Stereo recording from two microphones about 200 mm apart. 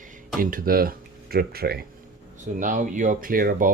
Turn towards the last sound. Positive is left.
turn(degrees=-45)  # may be behind; listen again after turning